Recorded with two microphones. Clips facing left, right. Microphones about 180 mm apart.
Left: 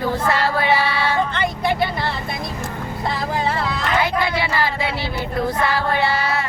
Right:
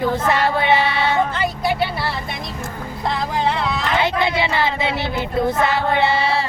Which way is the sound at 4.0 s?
25° right (ahead or behind).